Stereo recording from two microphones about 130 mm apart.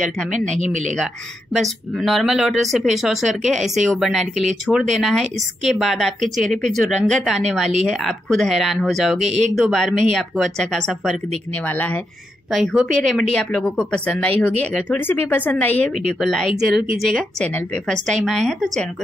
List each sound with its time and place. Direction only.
0.0 s speech: 75° right (ahead or behind)
1.5 s a woman's voice: centre (ahead or behind)
12.5 s a woman's voice: centre (ahead or behind)